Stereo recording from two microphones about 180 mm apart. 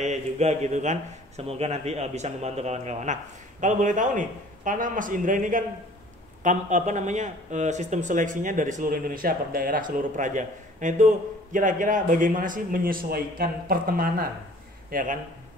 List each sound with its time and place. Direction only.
0.0 s a man's voice: 40° right (ahead or behind)